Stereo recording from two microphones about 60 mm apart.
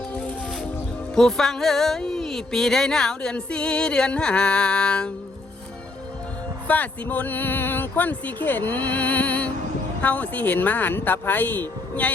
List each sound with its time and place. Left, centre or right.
0.1 s music: left
1.1 s music: centre
6.7 s speech: left